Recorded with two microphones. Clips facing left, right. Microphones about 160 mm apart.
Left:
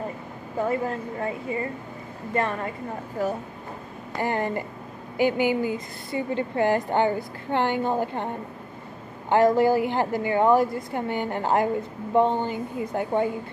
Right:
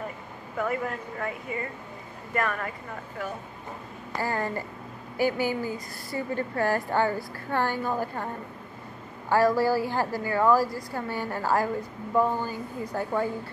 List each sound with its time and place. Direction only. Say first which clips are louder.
0.6 s a woman's voice: left 4 dB; 30° left (ahead or behind)
3.2 s speech: left 8 dB; 40° left (ahead or behind)
4.2 s a woman's voice: left 4 dB; 20° left (ahead or behind)
9.3 s a woman's voice: left 3 dB; 20° left (ahead or behind)